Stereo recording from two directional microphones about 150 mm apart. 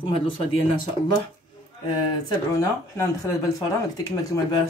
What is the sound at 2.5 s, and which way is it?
Speech, 20° left (ahead or behind).